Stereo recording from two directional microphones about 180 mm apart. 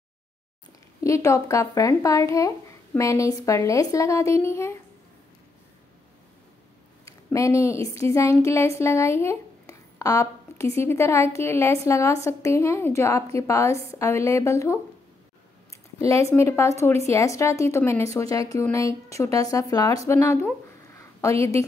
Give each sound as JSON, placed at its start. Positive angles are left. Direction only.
{"t": 1.0, "sound": "speech", "side_deg": 15}
{"t": 7.1, "sound": "speech", "side_deg": 15}
{"t": 16.1, "sound": "speech", "side_deg": 15}